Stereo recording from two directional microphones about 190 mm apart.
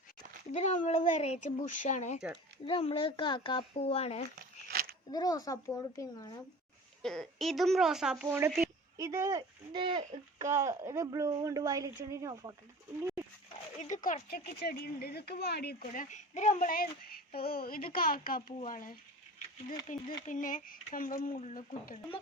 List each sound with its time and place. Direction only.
0.5 s speech: 40° left (ahead or behind)
4.7 s a sound: 50° right (ahead or behind)
5.1 s speech: 20° left (ahead or behind)
7.0 s speech: 5° left (ahead or behind); by 12.5 s 20° right (ahead or behind)
13.7 s speech: 40° left (ahead or behind)